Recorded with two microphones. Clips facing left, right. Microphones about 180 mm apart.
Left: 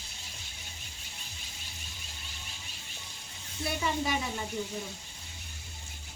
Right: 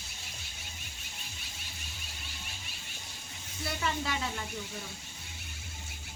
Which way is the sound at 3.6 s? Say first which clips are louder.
Left 3 dB; 15° left (ahead or behind).